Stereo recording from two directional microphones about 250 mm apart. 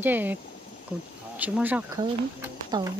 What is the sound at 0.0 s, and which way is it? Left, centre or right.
Speech, centre.